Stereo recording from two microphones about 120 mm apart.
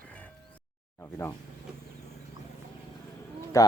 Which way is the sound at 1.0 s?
20° left (ahead or behind).